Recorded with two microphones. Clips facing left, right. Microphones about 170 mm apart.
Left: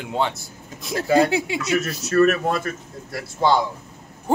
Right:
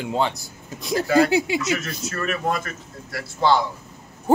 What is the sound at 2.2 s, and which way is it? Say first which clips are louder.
Speech: left 7 dB; 45° left (ahead or behind).